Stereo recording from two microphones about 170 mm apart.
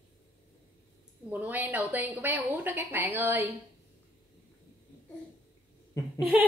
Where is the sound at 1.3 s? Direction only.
10° right (ahead or behind).